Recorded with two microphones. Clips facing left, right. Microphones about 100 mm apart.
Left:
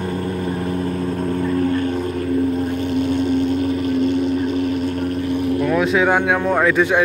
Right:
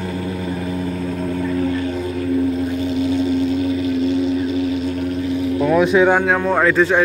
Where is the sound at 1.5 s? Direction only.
50° left (ahead or behind).